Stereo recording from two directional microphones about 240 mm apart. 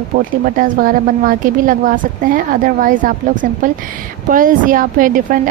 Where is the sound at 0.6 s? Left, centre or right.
Right.